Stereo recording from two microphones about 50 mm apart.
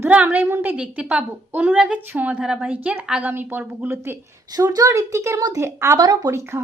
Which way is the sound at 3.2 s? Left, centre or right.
Right.